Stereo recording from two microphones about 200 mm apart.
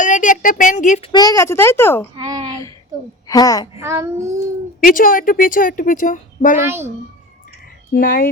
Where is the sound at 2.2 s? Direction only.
20° right (ahead or behind).